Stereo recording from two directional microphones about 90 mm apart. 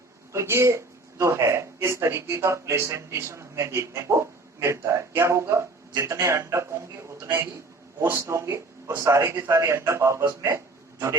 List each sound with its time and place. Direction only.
0.3 s speech: 30° right (ahead or behind)